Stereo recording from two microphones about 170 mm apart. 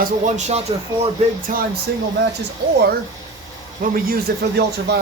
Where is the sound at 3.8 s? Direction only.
60° right (ahead or behind).